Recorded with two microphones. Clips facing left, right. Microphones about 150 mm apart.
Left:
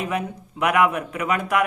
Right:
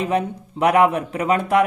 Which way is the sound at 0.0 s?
30° right (ahead or behind).